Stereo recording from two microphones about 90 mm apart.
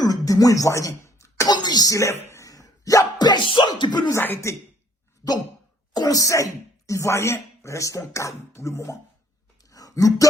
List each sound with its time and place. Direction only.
0.0 s cough: 45° left (ahead or behind)
1.5 s a sound: 50° left (ahead or behind); by 3.7 s 65° left (ahead or behind)
3.8 s speech: 55° left (ahead or behind)
4.4 s cough: 30° left (ahead or behind)
5.9 s speech: 45° left (ahead or behind)
8.5 s cough: 35° left (ahead or behind)
9.6 s a sound: 40° left (ahead or behind)